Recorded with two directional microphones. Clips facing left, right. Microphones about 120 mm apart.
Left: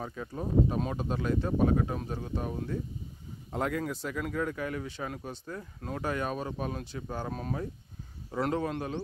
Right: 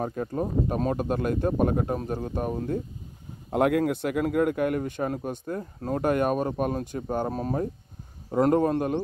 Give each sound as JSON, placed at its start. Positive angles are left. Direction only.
{"t": 0.0, "sound": "speech", "side_deg": -45}
{"t": 3.4, "sound": "a man's voice", "side_deg": -65}